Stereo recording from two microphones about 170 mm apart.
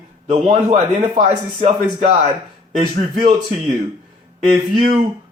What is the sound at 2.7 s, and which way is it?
Speech, 40° right (ahead or behind).